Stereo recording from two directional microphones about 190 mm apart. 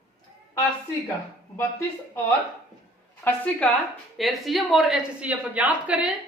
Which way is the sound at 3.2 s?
10° left (ahead or behind).